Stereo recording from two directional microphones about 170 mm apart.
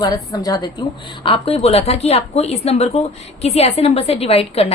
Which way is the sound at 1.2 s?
35° left (ahead or behind).